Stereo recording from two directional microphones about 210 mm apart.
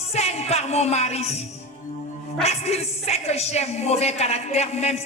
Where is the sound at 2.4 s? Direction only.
30° left (ahead or behind).